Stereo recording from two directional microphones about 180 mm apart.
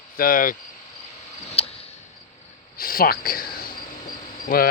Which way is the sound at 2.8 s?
55° left (ahead or behind).